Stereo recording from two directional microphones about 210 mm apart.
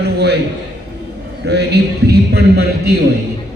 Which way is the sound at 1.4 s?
50° right (ahead or behind).